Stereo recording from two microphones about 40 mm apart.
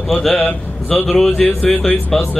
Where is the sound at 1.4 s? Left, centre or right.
Left.